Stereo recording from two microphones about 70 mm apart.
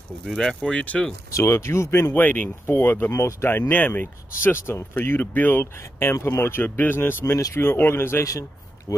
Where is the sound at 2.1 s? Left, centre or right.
Left.